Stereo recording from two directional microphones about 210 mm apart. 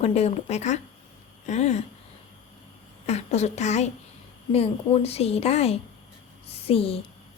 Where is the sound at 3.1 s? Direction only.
30° left (ahead or behind).